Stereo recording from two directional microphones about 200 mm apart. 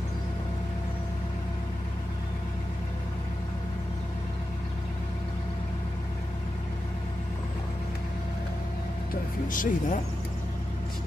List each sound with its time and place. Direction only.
9.1 s speech: 45° left (ahead or behind)